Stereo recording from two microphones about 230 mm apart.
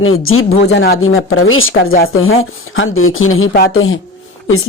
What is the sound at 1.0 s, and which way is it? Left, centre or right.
Speech, left.